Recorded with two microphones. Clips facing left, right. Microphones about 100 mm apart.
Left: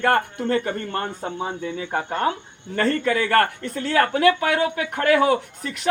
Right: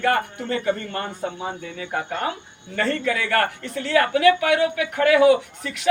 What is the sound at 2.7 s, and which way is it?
A man's voice, 40° left (ahead or behind).